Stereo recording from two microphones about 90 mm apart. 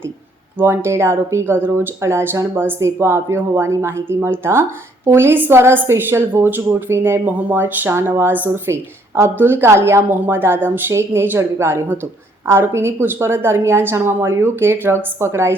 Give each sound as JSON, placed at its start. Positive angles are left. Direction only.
{"t": 0.6, "sound": "a woman's voice", "side_deg": -30}